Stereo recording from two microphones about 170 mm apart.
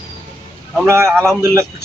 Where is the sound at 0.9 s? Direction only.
15° right (ahead or behind).